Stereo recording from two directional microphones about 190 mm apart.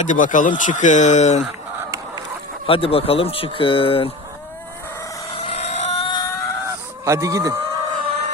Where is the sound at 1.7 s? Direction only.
15° right (ahead or behind).